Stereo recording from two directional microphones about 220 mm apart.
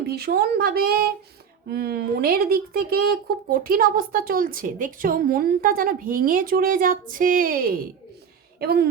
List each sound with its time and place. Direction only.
0.0 s speech: 45° right (ahead or behind)